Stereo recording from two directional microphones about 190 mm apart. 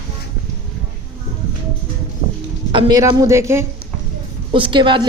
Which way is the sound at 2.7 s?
25° right (ahead or behind).